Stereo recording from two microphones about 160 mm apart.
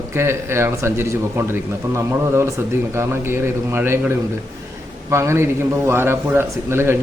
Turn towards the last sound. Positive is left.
turn(degrees=-15)  # may be behind; listen again after turning